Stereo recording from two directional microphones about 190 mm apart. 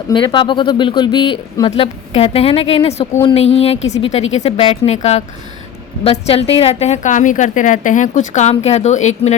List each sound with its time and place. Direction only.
0.1 s a woman's voice: 25° left (ahead or behind)